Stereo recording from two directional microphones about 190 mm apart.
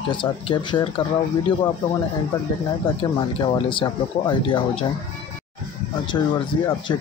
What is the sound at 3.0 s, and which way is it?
Speech, 25° left (ahead or behind).